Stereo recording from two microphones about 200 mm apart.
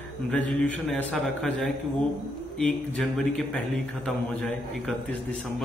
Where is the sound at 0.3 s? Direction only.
5° left (ahead or behind).